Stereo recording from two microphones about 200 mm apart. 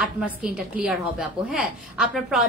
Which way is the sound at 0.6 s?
5° right (ahead or behind).